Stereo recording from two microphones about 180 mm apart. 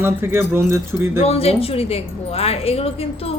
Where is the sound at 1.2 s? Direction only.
35° left (ahead or behind).